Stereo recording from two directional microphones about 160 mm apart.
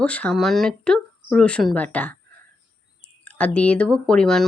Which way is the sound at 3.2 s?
10° left (ahead or behind).